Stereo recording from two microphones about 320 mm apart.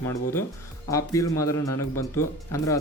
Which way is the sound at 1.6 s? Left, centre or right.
Left.